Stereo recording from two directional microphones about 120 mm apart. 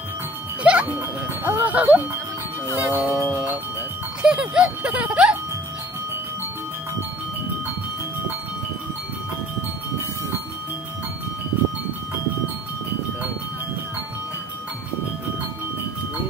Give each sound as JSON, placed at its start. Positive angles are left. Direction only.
{"t": 0.7, "sound": "speech", "side_deg": -15}
{"t": 4.2, "sound": "speech", "side_deg": -5}